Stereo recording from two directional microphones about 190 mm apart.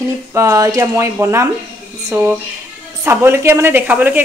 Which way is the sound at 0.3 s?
15° right (ahead or behind).